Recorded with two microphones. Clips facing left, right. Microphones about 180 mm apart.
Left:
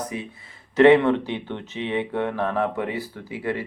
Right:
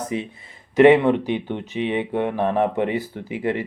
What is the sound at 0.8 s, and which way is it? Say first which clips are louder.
Speech: right 1 dB; 15° right (ahead or behind).